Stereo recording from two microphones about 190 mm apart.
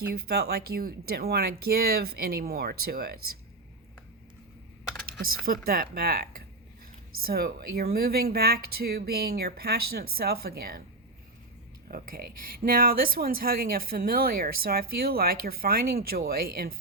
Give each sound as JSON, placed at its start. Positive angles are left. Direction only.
{"t": 0.1, "sound": "speech", "side_deg": -55}
{"t": 5.5, "sound": "speech", "side_deg": -50}
{"t": 11.9, "sound": "speech", "side_deg": -50}